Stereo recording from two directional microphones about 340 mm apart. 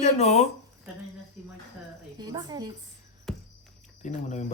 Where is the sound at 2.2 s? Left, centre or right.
Centre.